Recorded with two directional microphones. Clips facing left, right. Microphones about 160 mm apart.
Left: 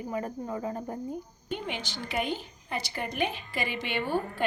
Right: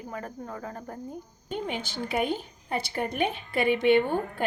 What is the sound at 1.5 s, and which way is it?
A woman's voice, 45° right (ahead or behind).